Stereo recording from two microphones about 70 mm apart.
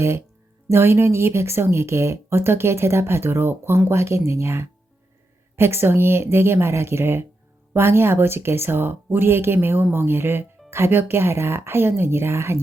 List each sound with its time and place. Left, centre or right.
0.7 s speech: right